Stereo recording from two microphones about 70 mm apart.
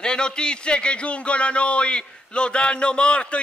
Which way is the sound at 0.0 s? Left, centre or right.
Centre.